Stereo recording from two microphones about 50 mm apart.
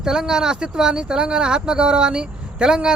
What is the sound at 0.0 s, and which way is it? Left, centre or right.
Speech, centre.